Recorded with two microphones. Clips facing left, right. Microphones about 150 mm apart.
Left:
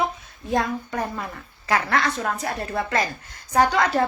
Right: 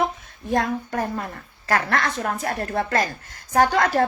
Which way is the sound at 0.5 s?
50° right (ahead or behind).